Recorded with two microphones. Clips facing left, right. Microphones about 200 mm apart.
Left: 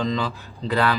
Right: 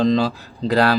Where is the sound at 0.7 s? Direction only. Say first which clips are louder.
Right 5 dB; 40° right (ahead or behind).